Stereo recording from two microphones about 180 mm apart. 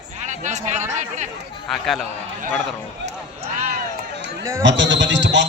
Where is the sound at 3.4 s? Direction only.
40° right (ahead or behind).